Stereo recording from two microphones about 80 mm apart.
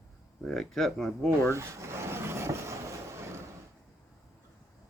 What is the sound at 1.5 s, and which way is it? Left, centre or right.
Vehicle, right.